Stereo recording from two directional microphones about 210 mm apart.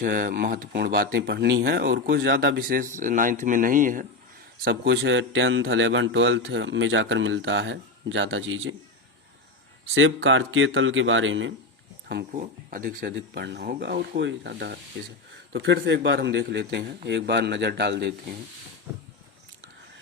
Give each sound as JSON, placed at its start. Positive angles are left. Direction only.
{"t": 0.0, "sound": "speech", "side_deg": -40}
{"t": 4.6, "sound": "a man's voice", "side_deg": -50}
{"t": 9.9, "sound": "a man's voice", "side_deg": -65}
{"t": 12.3, "sound": "speech", "side_deg": -40}
{"t": 13.1, "sound": "a man's voice", "side_deg": -55}